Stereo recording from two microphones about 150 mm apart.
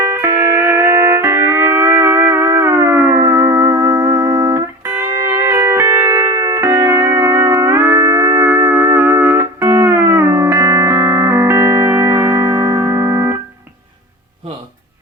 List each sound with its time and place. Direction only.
0.0 s music: 20° right (ahead or behind)